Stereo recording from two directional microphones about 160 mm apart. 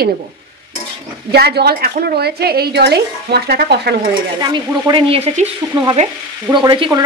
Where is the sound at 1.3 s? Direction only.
90° right.